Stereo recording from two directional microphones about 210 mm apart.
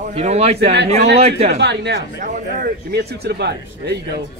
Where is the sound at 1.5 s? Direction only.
55° right (ahead or behind).